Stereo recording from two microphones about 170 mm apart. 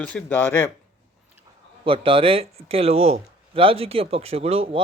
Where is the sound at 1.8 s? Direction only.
30° right (ahead or behind).